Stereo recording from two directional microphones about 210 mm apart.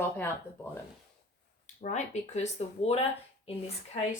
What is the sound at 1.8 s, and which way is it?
Speech, 35° left (ahead or behind).